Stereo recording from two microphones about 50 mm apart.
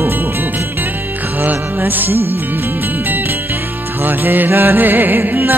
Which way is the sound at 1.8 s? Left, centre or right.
Right.